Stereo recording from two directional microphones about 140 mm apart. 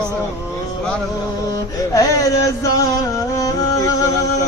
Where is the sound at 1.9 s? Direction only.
25° left (ahead or behind).